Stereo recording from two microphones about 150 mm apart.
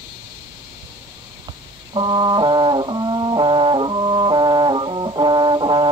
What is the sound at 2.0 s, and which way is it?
Brass instrument, 30° right (ahead or behind).